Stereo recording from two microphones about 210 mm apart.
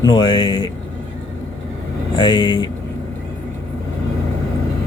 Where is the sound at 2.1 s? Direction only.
20° left (ahead or behind).